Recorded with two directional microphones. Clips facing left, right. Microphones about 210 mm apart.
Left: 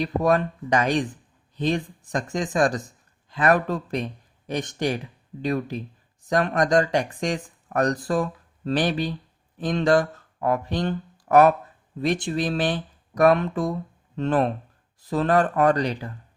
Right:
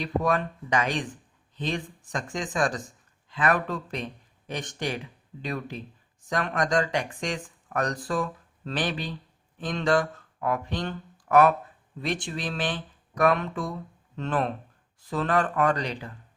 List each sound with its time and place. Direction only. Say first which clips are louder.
0.0 s speech: left 5 dB; 40° left (ahead or behind)